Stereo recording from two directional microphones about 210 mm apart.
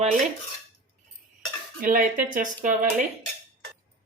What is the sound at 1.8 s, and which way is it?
Speech, 40° right (ahead or behind).